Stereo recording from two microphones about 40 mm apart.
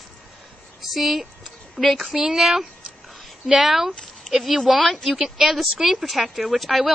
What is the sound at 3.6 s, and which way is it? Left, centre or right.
Speech, centre.